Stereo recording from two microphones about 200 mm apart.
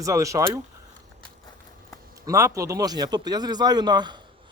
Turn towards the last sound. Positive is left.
turn(degrees=-20)  # may be behind; listen again after turning